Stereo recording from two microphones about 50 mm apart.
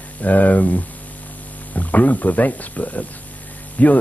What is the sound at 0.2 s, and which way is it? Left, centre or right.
Speech, left.